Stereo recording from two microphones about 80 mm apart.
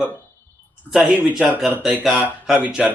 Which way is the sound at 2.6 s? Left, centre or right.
Centre.